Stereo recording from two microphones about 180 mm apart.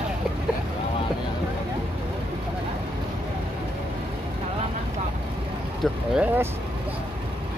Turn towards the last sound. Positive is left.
turn(degrees=-5)  # may be behind; listen again after turning